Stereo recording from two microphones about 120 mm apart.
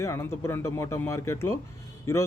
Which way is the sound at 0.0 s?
20° left (ahead or behind).